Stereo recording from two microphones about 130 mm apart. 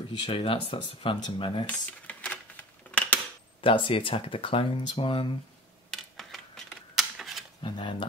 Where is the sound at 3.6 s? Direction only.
40° left (ahead or behind).